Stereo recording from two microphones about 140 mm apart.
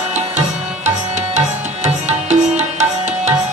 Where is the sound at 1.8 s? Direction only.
55° right (ahead or behind).